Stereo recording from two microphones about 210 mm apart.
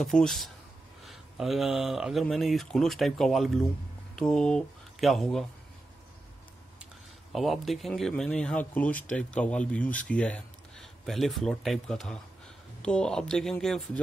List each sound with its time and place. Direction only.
0.0 s speech: centre (ahead or behind)
7.3 s speech: centre (ahead or behind)